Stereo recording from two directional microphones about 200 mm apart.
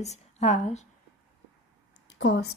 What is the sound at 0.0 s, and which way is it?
Speech, 35° left (ahead or behind).